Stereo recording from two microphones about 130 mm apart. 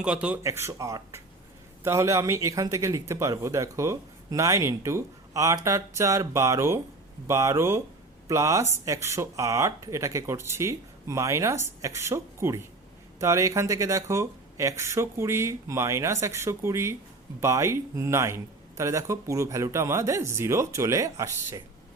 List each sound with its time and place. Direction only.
0.0 s speech: 10° right (ahead or behind)
0.4 s speech: 20° right (ahead or behind)